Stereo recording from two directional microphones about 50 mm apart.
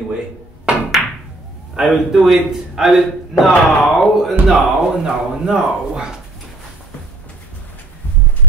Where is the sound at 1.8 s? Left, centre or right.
Centre.